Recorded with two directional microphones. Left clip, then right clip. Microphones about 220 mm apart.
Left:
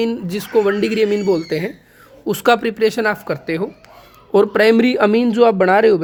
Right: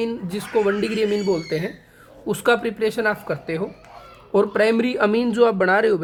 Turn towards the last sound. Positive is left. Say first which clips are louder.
# left 5 dB
turn(degrees=25)  # may be behind; listen again after turning